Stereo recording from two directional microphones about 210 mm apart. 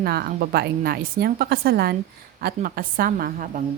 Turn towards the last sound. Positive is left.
turn(degrees=-40)  # may be behind; listen again after turning